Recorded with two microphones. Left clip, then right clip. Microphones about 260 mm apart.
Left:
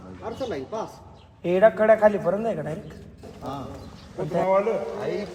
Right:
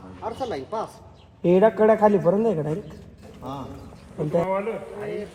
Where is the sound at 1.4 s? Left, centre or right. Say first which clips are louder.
Even; centre.